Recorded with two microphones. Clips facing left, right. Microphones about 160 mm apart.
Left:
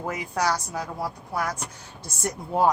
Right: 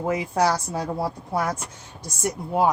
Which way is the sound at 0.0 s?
25° right (ahead or behind).